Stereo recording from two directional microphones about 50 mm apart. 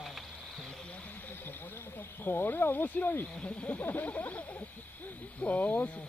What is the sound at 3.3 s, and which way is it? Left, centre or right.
Speech, left.